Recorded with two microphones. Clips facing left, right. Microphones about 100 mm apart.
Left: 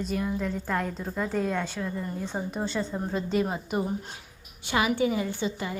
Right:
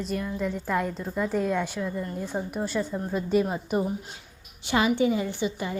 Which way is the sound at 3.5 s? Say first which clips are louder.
Right 2 dB; 20° left (ahead or behind).